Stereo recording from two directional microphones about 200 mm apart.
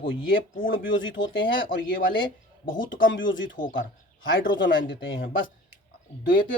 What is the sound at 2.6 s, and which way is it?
Speech, 70° left (ahead or behind).